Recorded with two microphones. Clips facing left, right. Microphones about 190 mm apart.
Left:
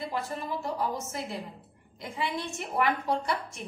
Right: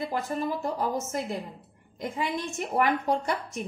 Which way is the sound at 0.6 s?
45° right (ahead or behind).